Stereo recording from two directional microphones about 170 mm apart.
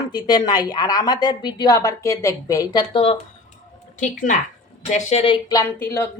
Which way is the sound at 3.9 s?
50° left (ahead or behind).